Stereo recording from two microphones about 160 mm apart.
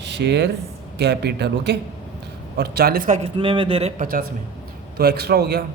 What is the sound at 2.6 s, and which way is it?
Speech, 75° right (ahead or behind).